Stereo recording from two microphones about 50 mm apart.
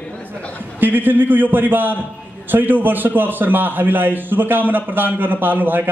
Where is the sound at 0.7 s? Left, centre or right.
Right.